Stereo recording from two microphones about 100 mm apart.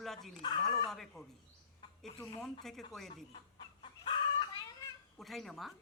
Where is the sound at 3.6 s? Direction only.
55° left (ahead or behind).